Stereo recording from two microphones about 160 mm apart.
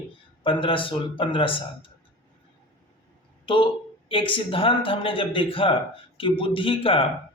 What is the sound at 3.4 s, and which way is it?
Speech, 30° left (ahead or behind).